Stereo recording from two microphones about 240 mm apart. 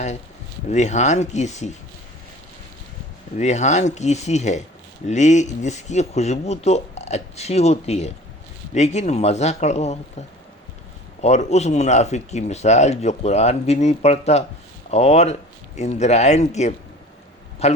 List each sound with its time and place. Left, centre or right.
0.7 s speech: left
3.3 s speech: left